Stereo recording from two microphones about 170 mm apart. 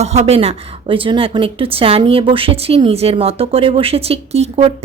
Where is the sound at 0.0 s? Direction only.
40° right (ahead or behind).